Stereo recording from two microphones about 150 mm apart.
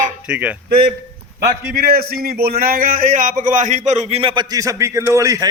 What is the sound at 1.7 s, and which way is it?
A man's voice, 90° right.